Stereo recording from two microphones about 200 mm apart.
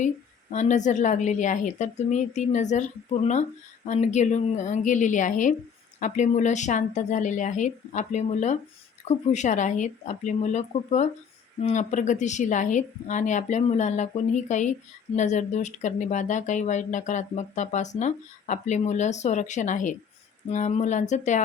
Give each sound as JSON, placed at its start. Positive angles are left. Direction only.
{"t": 0.5, "sound": "a woman's voice", "side_deg": 35}